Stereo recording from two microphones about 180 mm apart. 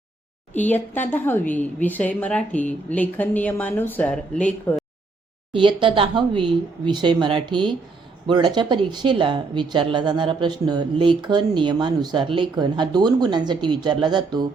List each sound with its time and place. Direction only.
0.5 s a woman's voice: 10° left (ahead or behind)
5.5 s speech: 25° right (ahead or behind)